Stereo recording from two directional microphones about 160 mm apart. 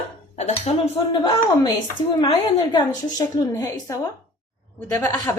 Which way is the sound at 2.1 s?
30° left (ahead or behind).